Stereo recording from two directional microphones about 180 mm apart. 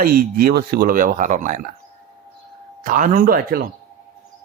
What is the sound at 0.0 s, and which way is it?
Speech, 55° right (ahead or behind).